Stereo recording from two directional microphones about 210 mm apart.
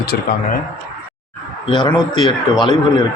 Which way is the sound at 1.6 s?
25° left (ahead or behind).